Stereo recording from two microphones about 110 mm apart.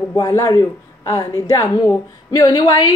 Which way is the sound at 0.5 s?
30° left (ahead or behind).